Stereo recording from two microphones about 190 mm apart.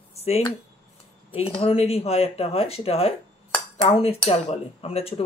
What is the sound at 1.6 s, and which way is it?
Speech, 30° left (ahead or behind).